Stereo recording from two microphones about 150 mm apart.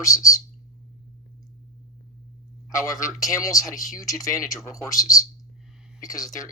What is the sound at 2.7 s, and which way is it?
Speech, 20° left (ahead or behind).